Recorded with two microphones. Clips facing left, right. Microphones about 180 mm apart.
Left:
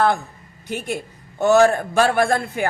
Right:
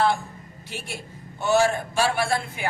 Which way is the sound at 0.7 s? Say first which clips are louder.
Left 10 dB; 50° left (ahead or behind).